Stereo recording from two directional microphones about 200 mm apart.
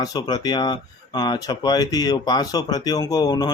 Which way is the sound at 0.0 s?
20° left (ahead or behind).